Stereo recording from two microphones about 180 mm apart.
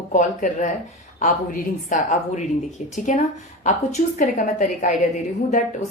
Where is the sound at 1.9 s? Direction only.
45° left (ahead or behind).